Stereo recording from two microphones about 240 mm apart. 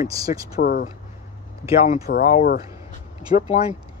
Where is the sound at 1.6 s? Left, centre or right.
Centre.